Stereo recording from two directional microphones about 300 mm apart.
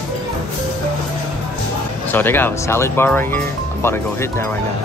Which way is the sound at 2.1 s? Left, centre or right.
Centre.